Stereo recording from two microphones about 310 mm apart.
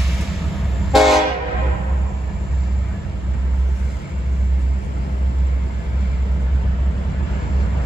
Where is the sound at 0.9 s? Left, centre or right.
Centre.